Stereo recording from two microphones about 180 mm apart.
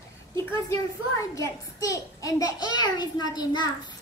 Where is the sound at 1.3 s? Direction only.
15° left (ahead or behind).